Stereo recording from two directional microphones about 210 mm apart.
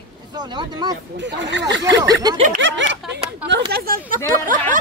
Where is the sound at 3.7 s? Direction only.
45° right (ahead or behind).